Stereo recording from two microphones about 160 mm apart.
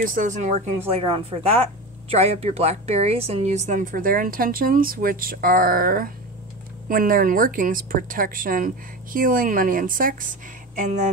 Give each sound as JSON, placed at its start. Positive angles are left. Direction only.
{"t": 0.0, "sound": "a woman's voice", "side_deg": -55}
{"t": 10.8, "sound": "speech", "side_deg": -50}